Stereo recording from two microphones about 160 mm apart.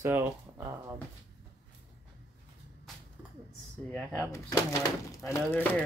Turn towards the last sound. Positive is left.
turn(degrees=10)  # may be behind; listen again after turning